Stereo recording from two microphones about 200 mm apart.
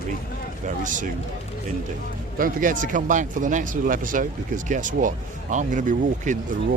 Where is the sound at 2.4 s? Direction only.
40° right (ahead or behind).